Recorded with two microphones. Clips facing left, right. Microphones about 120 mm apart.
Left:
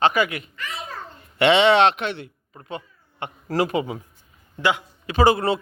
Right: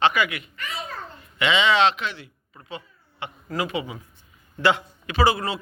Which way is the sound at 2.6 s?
50° left (ahead or behind).